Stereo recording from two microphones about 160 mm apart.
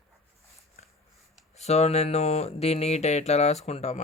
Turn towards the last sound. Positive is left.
turn(degrees=40)  # may be behind; listen again after turning